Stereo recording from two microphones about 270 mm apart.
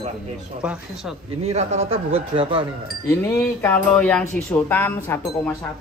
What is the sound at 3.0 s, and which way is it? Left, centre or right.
Speech, centre.